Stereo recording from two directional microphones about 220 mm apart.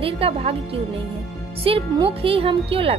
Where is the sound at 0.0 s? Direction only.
25° right (ahead or behind).